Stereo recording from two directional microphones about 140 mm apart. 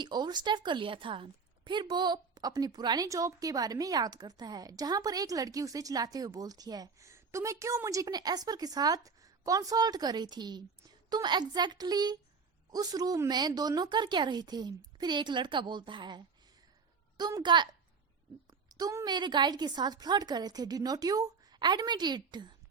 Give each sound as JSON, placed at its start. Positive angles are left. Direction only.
{"t": 0.0, "sound": "a woman's voice", "side_deg": -30}
{"t": 18.7, "sound": "a woman's voice", "side_deg": -25}